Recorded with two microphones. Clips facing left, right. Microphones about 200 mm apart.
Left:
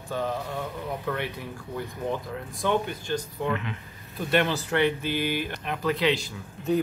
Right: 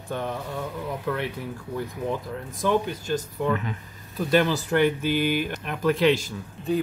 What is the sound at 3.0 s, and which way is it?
Speech, 45° right (ahead or behind).